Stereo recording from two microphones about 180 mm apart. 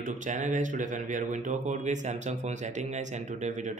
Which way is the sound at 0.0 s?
45° right (ahead or behind).